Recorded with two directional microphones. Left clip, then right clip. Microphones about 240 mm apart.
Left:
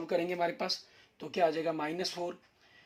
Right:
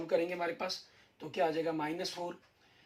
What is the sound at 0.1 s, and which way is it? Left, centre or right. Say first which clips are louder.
Speech: left 1 dB; left.